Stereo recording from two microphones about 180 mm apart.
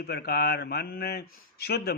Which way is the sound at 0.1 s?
60° left (ahead or behind).